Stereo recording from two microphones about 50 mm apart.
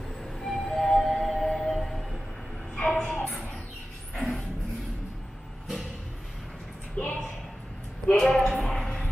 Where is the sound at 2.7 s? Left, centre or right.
Left.